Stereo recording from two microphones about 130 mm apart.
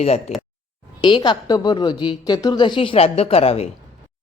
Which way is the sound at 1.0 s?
35° left (ahead or behind).